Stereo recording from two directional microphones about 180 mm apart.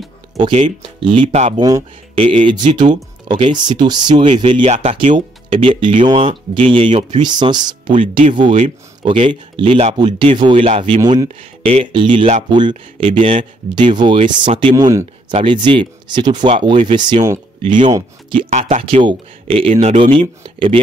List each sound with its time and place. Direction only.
0.8 s speech: 25° right (ahead or behind)
11.2 s speech: 35° right (ahead or behind)
18.5 s speech: 40° right (ahead or behind)